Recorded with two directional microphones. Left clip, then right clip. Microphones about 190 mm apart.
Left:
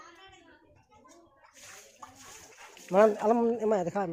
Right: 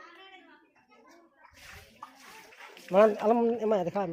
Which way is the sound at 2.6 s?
45° right (ahead or behind).